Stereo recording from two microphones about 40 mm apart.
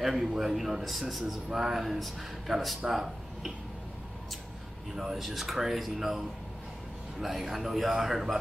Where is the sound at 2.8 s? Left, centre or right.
Centre.